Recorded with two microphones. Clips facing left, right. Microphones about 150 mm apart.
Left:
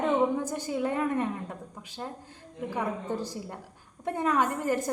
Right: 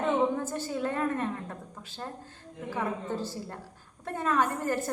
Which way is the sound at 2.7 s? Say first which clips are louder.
Even; 15° left (ahead or behind).